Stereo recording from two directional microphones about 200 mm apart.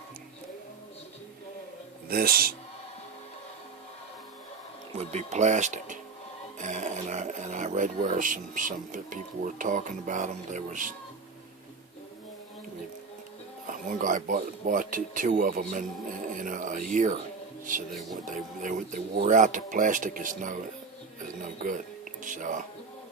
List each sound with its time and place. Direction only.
2.0 s speech: 50° right (ahead or behind)
4.9 s speech: 35° right (ahead or behind)
13.7 s speech: 40° right (ahead or behind)
18.3 s speech: 40° right (ahead or behind)
22.2 s speech: 40° right (ahead or behind)